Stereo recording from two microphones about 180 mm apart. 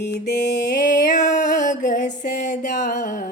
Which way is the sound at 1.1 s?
45° left (ahead or behind).